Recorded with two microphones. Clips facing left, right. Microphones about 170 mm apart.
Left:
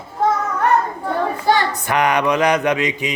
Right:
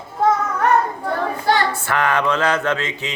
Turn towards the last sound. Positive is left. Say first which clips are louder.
# left 4 dB
turn(degrees=15)  # may be behind; listen again after turning